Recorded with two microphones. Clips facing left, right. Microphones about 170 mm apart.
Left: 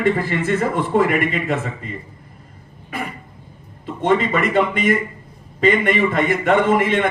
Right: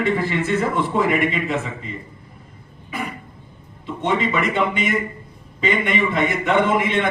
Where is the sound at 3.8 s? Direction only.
50° left (ahead or behind).